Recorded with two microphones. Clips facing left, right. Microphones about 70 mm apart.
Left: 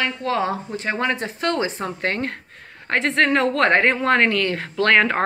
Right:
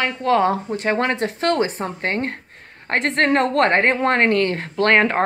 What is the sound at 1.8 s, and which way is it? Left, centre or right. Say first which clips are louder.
Speech: right 1 dB; right.